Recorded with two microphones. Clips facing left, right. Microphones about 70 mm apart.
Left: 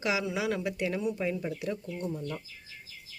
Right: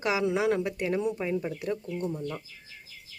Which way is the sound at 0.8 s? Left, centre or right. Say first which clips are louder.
Right 2 dB; right.